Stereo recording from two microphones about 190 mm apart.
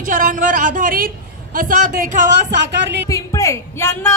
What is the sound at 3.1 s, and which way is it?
Speech, 15° left (ahead or behind).